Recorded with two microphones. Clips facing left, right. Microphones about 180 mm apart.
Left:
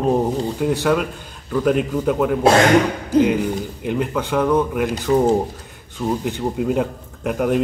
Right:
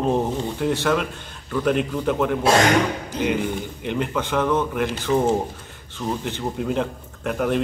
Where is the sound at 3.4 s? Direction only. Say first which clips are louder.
Left 3 dB; 40° left (ahead or behind).